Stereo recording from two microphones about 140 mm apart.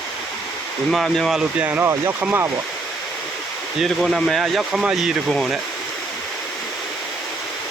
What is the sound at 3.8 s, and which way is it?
Speech, centre (ahead or behind).